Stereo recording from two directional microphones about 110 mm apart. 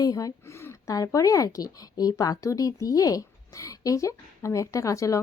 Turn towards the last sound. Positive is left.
turn(degrees=30)  # may be behind; listen again after turning